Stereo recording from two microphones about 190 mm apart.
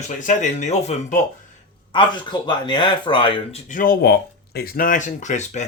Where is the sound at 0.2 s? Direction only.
40° left (ahead or behind).